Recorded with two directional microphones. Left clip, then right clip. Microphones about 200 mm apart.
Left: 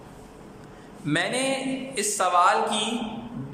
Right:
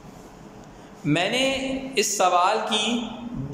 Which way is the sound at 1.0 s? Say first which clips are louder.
Right 3 dB; 10° right (ahead or behind).